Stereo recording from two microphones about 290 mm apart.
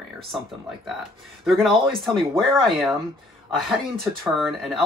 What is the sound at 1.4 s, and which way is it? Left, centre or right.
Speech, centre.